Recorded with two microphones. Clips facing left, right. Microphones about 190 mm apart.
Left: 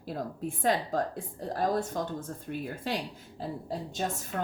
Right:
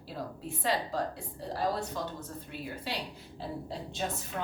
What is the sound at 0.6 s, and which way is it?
A woman's voice, 50° left (ahead or behind).